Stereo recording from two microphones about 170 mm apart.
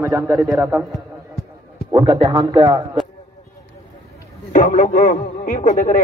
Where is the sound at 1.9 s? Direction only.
25° right (ahead or behind).